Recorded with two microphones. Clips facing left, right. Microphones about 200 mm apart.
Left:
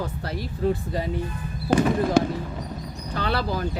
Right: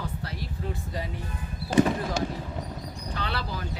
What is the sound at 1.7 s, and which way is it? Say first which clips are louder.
Speech: left 4 dB; 60° left (ahead or behind).